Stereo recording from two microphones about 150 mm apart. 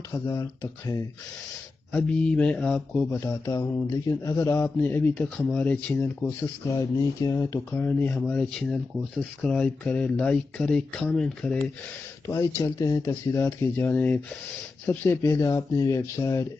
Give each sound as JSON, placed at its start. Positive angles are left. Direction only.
{"t": 0.3, "sound": "speech", "side_deg": 25}
{"t": 1.9, "sound": "speech", "side_deg": 5}
{"t": 6.7, "sound": "speech", "side_deg": 25}
{"t": 12.3, "sound": "speech", "side_deg": 20}